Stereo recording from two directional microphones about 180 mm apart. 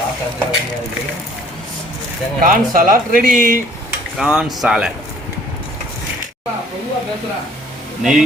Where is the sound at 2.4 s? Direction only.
55° right (ahead or behind).